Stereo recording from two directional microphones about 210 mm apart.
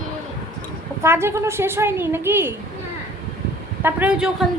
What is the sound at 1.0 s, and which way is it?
A woman's voice, 10° right (ahead or behind).